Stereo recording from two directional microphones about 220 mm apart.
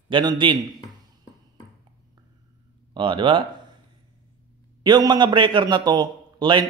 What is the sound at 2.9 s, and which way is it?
Speech, 20° right (ahead or behind).